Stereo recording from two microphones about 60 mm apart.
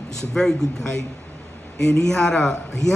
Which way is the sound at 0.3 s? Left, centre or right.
Centre.